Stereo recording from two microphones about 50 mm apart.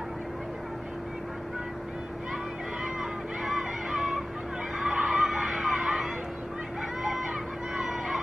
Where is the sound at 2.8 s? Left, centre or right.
Centre.